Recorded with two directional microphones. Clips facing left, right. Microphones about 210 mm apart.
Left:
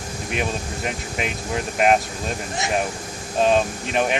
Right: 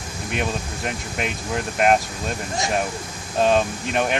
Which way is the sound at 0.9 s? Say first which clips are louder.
Even; centre (ahead or behind).